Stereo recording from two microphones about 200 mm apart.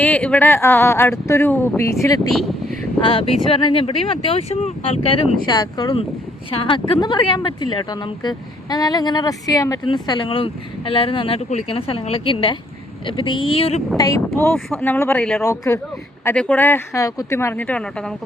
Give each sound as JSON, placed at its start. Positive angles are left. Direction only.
{"t": 0.0, "sound": "speech", "side_deg": 5}
{"t": 2.3, "sound": "speech", "side_deg": 0}
{"t": 3.0, "sound": "speech", "side_deg": 25}
{"t": 13.9, "sound": "speech", "side_deg": 15}
{"t": 15.4, "sound": "speech", "side_deg": 15}